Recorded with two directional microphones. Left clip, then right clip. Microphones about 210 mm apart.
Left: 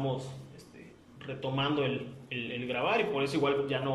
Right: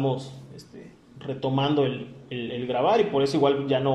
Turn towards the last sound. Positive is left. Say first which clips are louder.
# right 7 dB
turn(degrees=-30)  # may be behind; listen again after turning